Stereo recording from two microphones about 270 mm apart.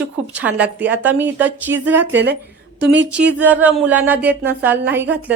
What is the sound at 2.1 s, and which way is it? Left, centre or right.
Speech, right.